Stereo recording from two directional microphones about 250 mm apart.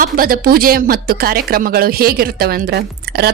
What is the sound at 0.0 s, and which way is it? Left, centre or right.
Speech, right.